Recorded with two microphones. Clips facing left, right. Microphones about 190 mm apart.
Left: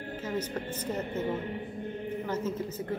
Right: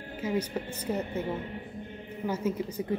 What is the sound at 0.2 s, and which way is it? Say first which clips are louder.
A woman's voice: right 4 dB; 10° right (ahead or behind).